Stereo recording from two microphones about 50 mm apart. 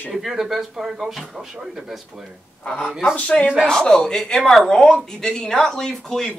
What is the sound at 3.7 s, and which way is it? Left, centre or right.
Speech, centre.